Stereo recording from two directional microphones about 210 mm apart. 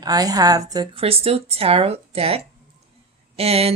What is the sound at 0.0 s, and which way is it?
A woman's voice, 20° right (ahead or behind).